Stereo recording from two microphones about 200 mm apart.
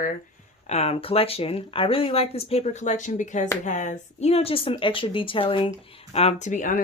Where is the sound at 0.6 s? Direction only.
30° left (ahead or behind).